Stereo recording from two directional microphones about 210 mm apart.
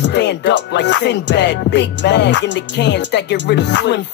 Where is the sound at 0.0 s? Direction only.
55° left (ahead or behind).